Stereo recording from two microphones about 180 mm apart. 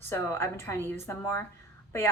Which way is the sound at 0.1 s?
15° left (ahead or behind).